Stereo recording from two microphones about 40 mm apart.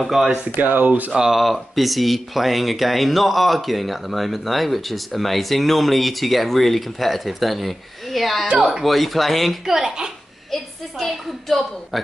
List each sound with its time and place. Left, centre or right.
0.0 s speech: centre
0.6 s speech: right
1.3 s speech: centre
9.7 s a child's voice: centre
10.5 s a woman's voice: centre